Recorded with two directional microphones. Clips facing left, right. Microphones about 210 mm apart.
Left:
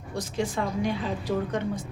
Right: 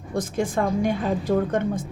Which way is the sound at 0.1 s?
50° right (ahead or behind).